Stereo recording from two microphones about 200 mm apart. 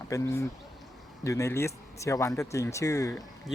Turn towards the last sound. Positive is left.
turn(degrees=15)  # may be behind; listen again after turning